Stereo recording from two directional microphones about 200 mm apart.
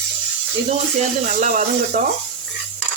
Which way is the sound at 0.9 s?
40° right (ahead or behind).